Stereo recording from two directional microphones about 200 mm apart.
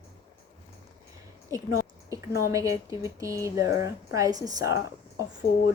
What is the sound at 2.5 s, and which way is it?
A woman's voice, 15° right (ahead or behind).